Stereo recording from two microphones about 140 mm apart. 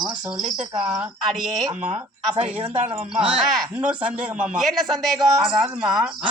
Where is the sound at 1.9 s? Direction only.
50° right (ahead or behind).